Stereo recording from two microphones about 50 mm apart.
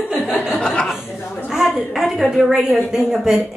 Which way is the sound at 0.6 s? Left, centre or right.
Left.